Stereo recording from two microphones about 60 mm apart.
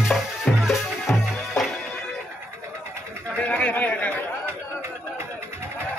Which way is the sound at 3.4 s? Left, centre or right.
Left.